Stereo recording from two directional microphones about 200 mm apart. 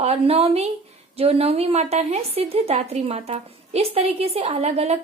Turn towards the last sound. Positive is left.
turn(degrees=-30)  # may be behind; listen again after turning